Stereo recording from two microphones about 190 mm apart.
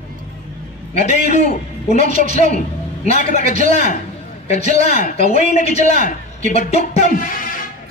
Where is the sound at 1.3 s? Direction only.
35° left (ahead or behind).